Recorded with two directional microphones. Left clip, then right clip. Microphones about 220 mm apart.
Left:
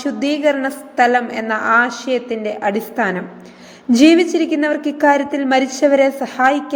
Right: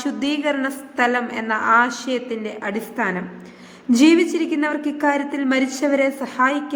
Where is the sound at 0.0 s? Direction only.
10° left (ahead or behind).